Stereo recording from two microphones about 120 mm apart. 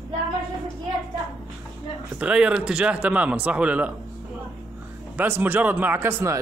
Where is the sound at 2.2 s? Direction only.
10° right (ahead or behind).